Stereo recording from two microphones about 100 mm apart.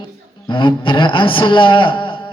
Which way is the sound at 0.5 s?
55° left (ahead or behind).